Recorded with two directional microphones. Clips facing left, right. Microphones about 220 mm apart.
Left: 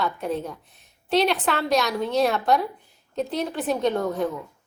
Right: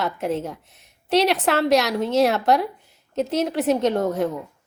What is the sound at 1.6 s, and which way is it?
Speech, 25° right (ahead or behind).